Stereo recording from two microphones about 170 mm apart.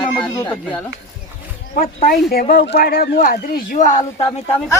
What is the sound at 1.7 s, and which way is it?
Speech, 60° left (ahead or behind).